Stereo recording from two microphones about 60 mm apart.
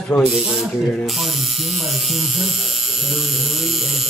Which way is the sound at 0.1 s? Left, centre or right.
Left.